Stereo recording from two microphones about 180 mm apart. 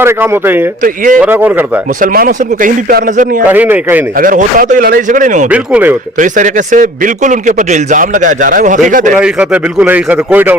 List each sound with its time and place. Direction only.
0.0 s a man's voice: 10° right (ahead or behind)
2.0 s a man's voice: 50° right (ahead or behind)
3.4 s a man's voice: 10° right (ahead or behind)
4.2 s a man's voice: 50° right (ahead or behind)
5.5 s a man's voice: 10° right (ahead or behind)
6.1 s a man's voice: 45° right (ahead or behind)
9.1 s a man's voice: 5° right (ahead or behind)